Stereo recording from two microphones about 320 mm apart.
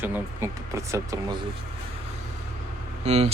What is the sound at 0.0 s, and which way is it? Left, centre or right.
Speech, centre.